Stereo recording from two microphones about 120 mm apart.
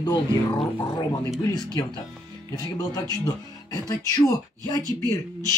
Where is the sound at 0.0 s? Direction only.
35° left (ahead or behind).